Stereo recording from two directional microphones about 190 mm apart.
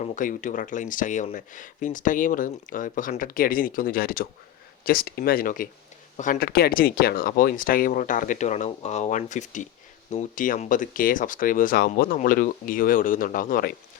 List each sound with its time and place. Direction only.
0.0 s speech: 40° left (ahead or behind)